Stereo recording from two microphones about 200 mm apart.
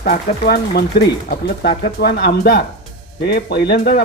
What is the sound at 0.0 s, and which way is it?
Speech, 50° left (ahead or behind).